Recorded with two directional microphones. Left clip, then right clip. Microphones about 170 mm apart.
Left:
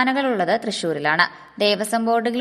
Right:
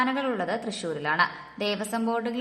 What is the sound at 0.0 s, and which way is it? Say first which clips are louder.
A woman's voice: left 7 dB; 30° left (ahead or behind).